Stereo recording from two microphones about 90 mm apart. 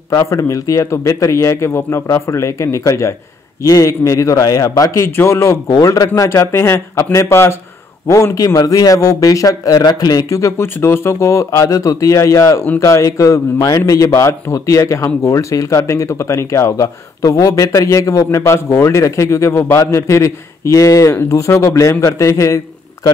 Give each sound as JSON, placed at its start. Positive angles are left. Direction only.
{"t": 0.1, "sound": "speech", "side_deg": 40}